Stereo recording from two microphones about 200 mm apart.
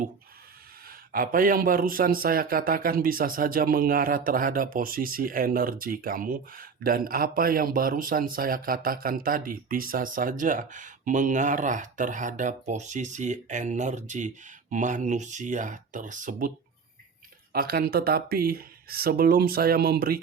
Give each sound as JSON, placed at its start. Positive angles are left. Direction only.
{"t": 0.9, "sound": "a man's voice", "side_deg": -45}
{"t": 17.5, "sound": "a man's voice", "side_deg": -50}